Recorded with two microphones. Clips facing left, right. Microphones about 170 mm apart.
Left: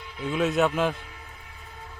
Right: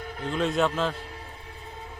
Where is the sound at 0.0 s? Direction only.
50° right (ahead or behind).